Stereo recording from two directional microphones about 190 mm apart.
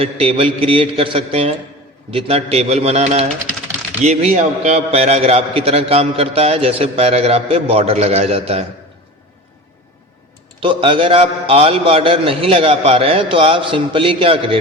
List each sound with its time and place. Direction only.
0.0 s a man's voice: 30° right (ahead or behind)
10.6 s a man's voice: 25° right (ahead or behind)